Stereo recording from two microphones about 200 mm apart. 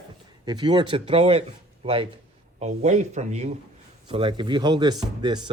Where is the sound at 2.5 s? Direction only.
35° right (ahead or behind).